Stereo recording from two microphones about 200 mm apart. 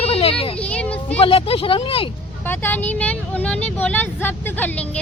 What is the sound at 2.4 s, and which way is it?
Speech, 10° left (ahead or behind).